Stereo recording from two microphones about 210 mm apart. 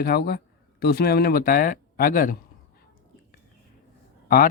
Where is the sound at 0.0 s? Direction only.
50° left (ahead or behind).